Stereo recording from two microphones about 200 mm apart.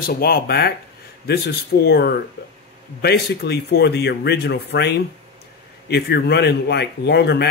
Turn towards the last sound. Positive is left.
turn(degrees=55)  # may be behind; listen again after turning